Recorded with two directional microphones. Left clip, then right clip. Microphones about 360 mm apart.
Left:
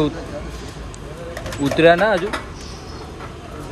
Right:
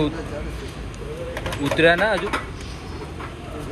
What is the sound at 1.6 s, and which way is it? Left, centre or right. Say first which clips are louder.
Speech: left 4 dB; left.